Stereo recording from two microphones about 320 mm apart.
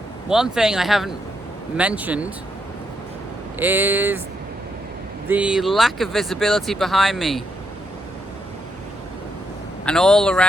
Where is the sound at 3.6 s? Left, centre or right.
Centre.